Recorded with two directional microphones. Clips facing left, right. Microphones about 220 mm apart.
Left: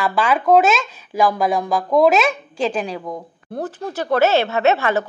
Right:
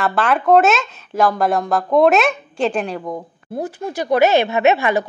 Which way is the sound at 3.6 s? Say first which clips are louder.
Right 1 dB; 15° right (ahead or behind).